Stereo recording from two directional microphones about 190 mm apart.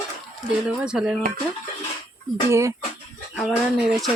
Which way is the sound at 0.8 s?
5° right (ahead or behind).